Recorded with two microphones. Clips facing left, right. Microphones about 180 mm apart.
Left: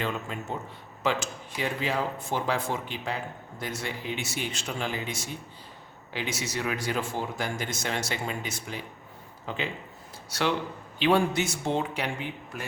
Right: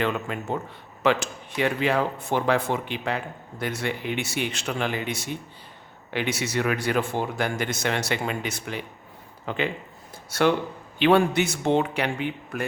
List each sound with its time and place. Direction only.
0.0 s speech: 65° right (ahead or behind)
10.2 s speech: 50° right (ahead or behind)
11.0 s speech: 65° right (ahead or behind)